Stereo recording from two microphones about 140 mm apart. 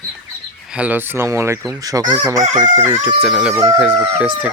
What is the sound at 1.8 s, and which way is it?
Crowing, 25° right (ahead or behind).